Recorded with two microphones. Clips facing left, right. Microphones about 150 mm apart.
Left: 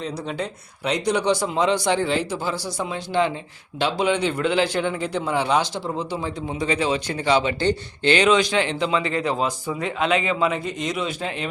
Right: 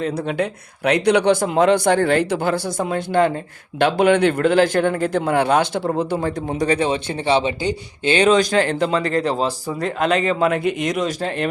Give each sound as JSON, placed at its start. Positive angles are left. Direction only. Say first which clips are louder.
{"t": 0.0, "sound": "a man's voice", "louder": "right 6 dB", "side_deg": -60}
{"t": 7.1, "sound": "speech", "louder": "even", "side_deg": -25}
{"t": 7.6, "sound": "speech", "louder": "left 1 dB", "side_deg": -10}
{"t": 8.1, "sound": "speech", "louder": "right 3 dB", "side_deg": -35}
{"t": 10.5, "sound": "a man's voice", "louder": "right 6 dB", "side_deg": -60}